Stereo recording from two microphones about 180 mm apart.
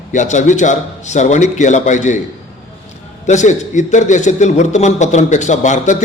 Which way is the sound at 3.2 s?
40° left (ahead or behind).